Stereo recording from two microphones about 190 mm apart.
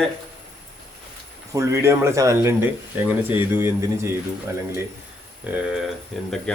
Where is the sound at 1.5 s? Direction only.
15° right (ahead or behind).